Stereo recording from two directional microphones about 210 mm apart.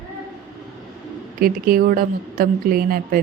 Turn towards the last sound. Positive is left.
turn(degrees=-45)  # may be behind; listen again after turning